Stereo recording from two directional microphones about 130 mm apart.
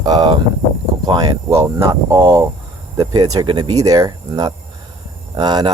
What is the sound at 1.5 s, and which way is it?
Speech, 25° right (ahead or behind).